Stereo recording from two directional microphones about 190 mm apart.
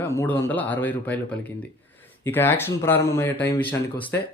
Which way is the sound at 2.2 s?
10° left (ahead or behind).